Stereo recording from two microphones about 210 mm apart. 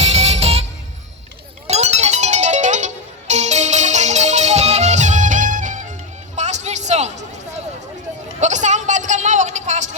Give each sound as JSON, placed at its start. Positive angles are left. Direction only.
{"t": 0.0, "sound": "music", "side_deg": -30}
{"t": 1.6, "sound": "music", "side_deg": -30}
{"t": 6.3, "sound": "a sound", "side_deg": -35}